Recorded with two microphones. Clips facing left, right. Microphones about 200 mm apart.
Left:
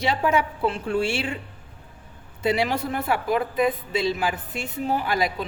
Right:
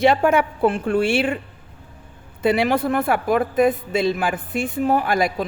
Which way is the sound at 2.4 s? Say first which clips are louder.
Right 5 dB; 55° right (ahead or behind).